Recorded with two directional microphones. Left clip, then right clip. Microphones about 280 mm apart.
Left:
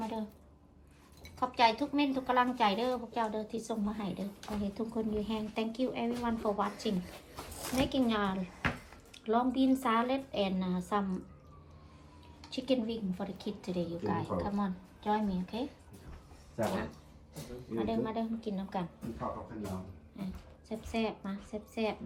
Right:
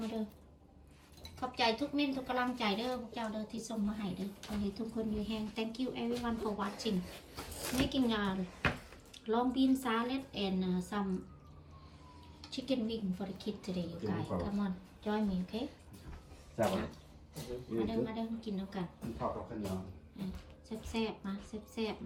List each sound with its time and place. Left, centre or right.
1.4 s a woman's voice: centre
12.4 s a woman's voice: centre